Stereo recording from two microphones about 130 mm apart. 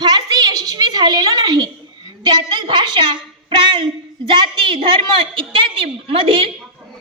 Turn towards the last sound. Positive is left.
turn(degrees=-45)  # may be behind; listen again after turning